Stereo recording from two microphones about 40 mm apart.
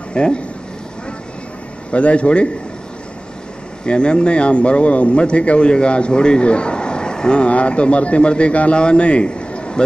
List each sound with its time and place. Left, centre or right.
0.1 s speech: left
1.9 s speech: left
3.8 s speech: left